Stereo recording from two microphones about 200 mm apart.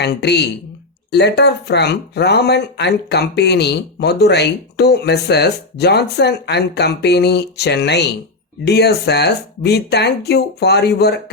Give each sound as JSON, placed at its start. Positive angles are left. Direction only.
{"t": 0.0, "sound": "speech", "side_deg": 55}